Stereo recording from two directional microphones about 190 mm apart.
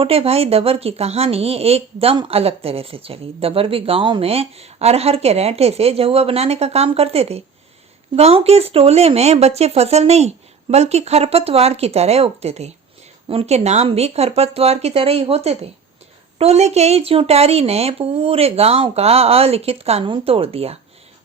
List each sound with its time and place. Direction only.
0.0 s a woman's voice: 30° right (ahead or behind)